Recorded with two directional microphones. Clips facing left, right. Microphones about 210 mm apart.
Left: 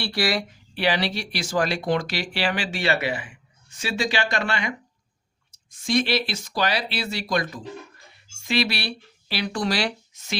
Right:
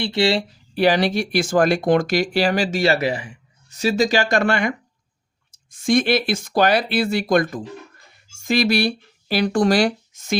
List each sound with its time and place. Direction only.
0.0 s speech: 25° right (ahead or behind); by 10.3 s 45° right (ahead or behind)